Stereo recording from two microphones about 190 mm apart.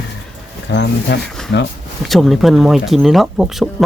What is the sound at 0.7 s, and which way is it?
Speech, 65° left (ahead or behind).